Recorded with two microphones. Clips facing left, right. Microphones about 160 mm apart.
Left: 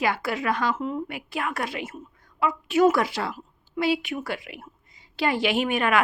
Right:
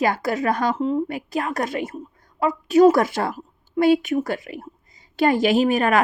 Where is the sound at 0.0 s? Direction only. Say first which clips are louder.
Right 5 dB; 40° right (ahead or behind).